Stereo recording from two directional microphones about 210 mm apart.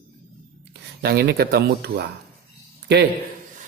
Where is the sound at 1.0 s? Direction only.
45° right (ahead or behind).